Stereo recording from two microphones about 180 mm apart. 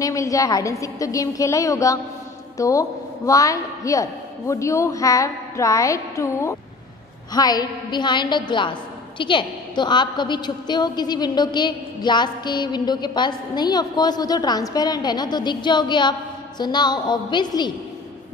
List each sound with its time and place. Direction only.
0.0 s a woman's voice: 20° left (ahead or behind)